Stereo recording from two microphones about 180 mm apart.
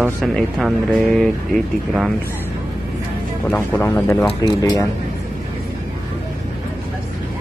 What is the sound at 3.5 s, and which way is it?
Speech, 10° left (ahead or behind).